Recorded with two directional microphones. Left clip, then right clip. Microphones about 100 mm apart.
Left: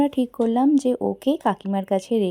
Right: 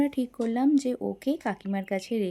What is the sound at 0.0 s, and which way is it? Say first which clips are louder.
Speech: left 7 dB; 30° left (ahead or behind).